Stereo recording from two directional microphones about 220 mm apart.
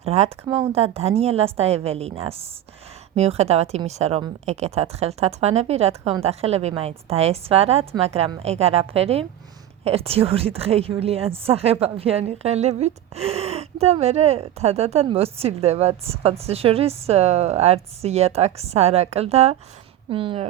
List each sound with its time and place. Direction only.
0.0 s a woman's voice: 25° right (ahead or behind)